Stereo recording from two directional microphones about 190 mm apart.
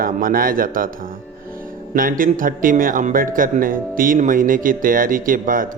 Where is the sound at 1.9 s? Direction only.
45° right (ahead or behind).